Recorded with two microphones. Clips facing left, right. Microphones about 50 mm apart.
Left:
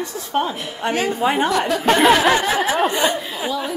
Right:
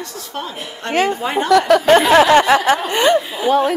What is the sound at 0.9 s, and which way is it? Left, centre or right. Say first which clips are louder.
Speech: right 6 dB; right.